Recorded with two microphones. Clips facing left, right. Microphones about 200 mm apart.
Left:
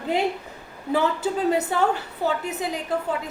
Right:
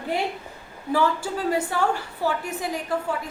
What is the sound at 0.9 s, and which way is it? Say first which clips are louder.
A woman's voice: left 1 dB; 20° left (ahead or behind).